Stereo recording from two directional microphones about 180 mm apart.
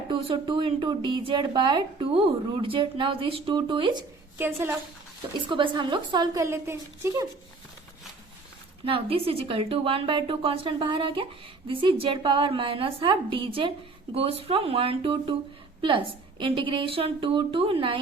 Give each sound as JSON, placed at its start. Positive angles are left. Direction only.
{"t": 0.1, "sound": "a woman's voice", "side_deg": -25}
{"t": 4.4, "sound": "a woman's voice", "side_deg": -10}
{"t": 5.5, "sound": "a woman's voice", "side_deg": -25}
{"t": 8.8, "sound": "a woman's voice", "side_deg": -30}